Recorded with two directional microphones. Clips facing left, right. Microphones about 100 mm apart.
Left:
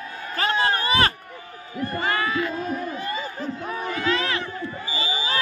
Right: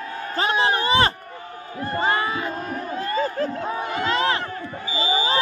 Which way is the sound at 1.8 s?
25° right (ahead or behind).